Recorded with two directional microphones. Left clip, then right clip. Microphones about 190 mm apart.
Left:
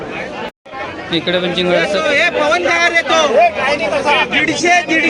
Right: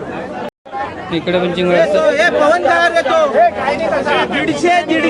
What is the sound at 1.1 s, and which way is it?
Speech, 5° right (ahead or behind).